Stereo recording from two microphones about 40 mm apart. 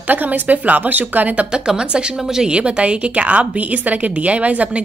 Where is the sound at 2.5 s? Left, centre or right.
Right.